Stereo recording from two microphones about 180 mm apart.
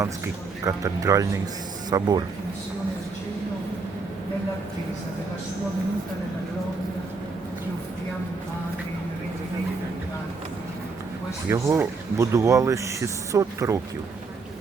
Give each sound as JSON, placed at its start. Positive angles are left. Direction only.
{"t": 0.6, "sound": "speech", "side_deg": -20}
{"t": 11.4, "sound": "speech", "side_deg": -15}